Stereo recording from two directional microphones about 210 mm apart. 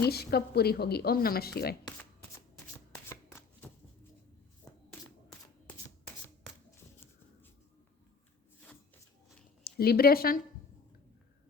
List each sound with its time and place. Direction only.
0.0 s speech: 50° left (ahead or behind)
2.9 s shuffling cards: 10° left (ahead or behind)
4.7 s a sound: 15° left (ahead or behind)
9.6 s speech: 50° left (ahead or behind)